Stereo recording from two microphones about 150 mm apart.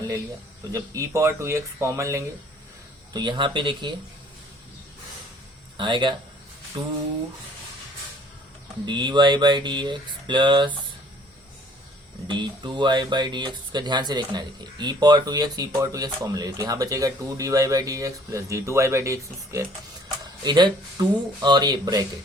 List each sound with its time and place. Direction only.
0.7 s speech: 20° right (ahead or behind)
3.1 s speech: 30° right (ahead or behind)
5.7 s speech: 30° right (ahead or behind)
8.9 s speech: 30° right (ahead or behind)
12.3 s speech: 30° right (ahead or behind)